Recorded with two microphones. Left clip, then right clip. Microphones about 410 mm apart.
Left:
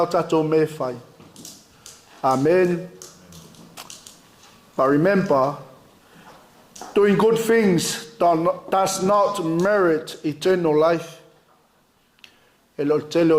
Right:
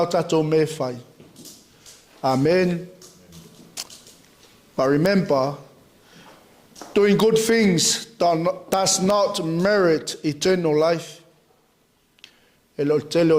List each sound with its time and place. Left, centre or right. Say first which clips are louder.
0.0 s speech: left 1 dB; right
2.2 s speech: left 1 dB; right
4.8 s speech: left 1 dB; right
6.9 s speech: even; right
12.7 s speech: even; right